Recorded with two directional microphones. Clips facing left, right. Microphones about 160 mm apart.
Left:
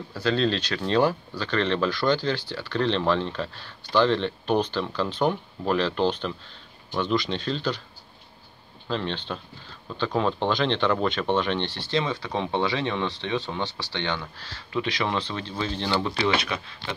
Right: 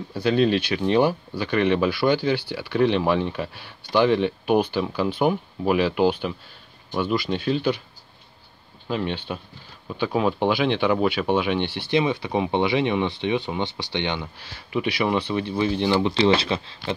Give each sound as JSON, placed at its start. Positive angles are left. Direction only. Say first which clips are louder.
{"t": 0.1, "sound": "speech", "louder": "right 4 dB", "side_deg": -15}
{"t": 8.8, "sound": "speech", "louder": "right 3 dB", "side_deg": -10}
{"t": 16.2, "sound": "speech", "louder": "right 6 dB", "side_deg": -30}